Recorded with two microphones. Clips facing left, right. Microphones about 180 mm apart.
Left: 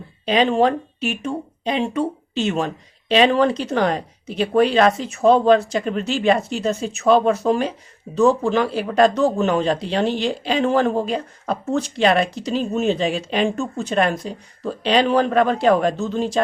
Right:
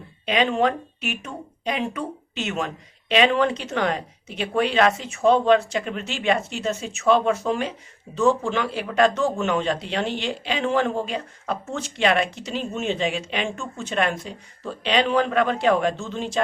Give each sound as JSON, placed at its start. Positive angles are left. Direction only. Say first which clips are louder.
{"t": 0.3, "sound": "speech", "louder": "left 4 dB", "side_deg": 35}